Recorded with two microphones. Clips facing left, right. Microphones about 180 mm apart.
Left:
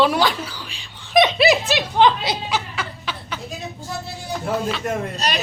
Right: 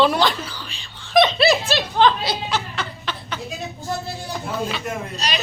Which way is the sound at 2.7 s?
5° left (ahead or behind).